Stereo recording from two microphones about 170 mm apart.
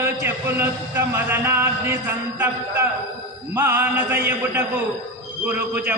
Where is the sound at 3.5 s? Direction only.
10° right (ahead or behind).